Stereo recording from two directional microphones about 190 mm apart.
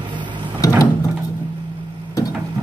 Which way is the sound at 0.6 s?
15° left (ahead or behind).